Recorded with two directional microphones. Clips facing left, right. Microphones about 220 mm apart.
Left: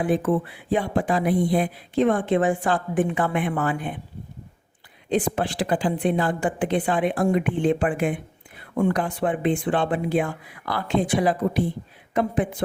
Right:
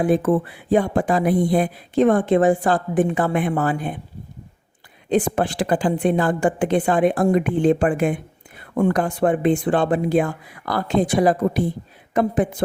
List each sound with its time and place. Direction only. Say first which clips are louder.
0.0 s speech: right 4 dB; 45° right (ahead or behind)
5.0 s a woman's voice: right 4 dB; 50° right (ahead or behind)